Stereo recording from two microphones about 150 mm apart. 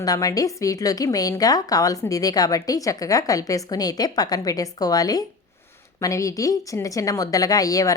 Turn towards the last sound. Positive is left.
turn(degrees=25)  # may be behind; listen again after turning